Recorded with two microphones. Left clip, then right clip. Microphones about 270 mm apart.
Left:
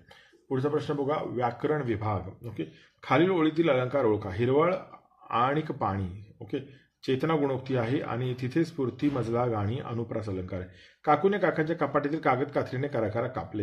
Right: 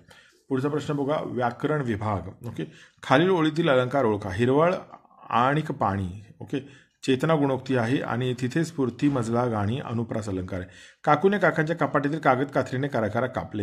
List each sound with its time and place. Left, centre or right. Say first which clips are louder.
0.5 s speech: right 1 dB; right